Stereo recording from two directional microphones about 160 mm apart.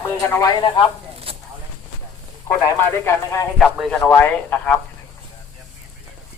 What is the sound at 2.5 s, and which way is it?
Speech, 15° left (ahead or behind).